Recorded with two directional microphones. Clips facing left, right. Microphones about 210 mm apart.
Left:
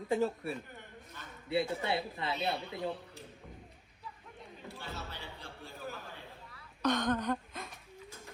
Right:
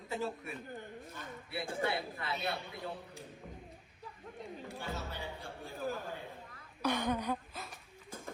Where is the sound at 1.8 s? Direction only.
25° left (ahead or behind).